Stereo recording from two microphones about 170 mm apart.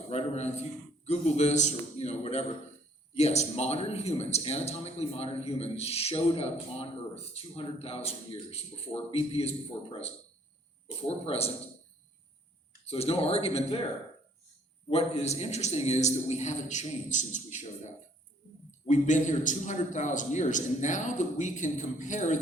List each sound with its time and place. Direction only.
0.1 s a man's voice: 40° left (ahead or behind)
10.8 s speech: 35° left (ahead or behind)
12.8 s speech: 35° left (ahead or behind)
14.8 s a man's voice: 35° left (ahead or behind)